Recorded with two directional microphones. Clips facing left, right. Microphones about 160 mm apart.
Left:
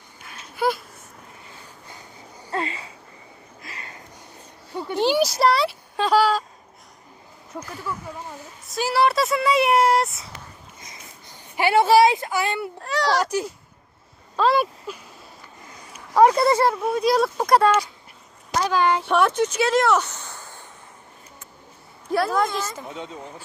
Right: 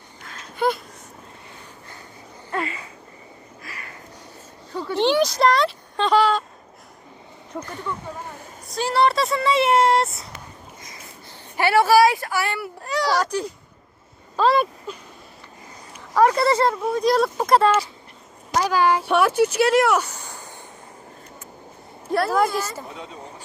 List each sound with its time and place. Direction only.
0.3 s babbling: 5° left (ahead or behind)
2.5 s a sound: 25° left (ahead or behind)
4.9 s speech: 5° left (ahead or behind)
7.5 s speech: 5° left (ahead or behind)
11.5 s speech: 15° left (ahead or behind)
12.8 s a child's voice: centre (ahead or behind)
14.3 s speech: centre (ahead or behind)
16.1 s speech: 20° left (ahead or behind); by 20.7 s 15° right (ahead or behind)
22.1 s a woman's voice: 5° right (ahead or behind)